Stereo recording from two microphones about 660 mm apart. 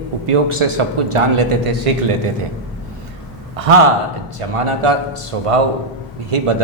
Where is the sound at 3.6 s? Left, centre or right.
Right.